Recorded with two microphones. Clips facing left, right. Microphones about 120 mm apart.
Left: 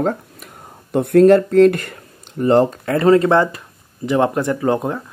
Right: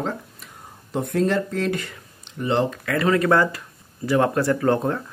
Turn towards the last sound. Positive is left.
turn(degrees=15)  # may be behind; listen again after turning